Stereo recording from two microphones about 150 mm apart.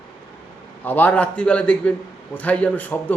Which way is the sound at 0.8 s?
10° left (ahead or behind).